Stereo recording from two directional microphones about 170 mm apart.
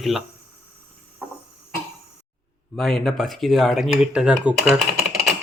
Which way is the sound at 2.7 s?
Centre (ahead or behind).